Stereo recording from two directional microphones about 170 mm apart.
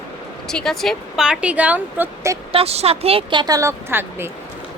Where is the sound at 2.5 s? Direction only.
35° right (ahead or behind); by 4.2 s 15° right (ahead or behind).